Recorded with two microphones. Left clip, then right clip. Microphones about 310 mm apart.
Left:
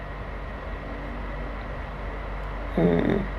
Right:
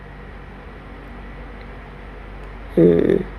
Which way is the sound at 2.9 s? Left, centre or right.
Right.